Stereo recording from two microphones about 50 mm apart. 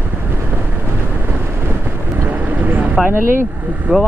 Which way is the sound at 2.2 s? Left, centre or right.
Right.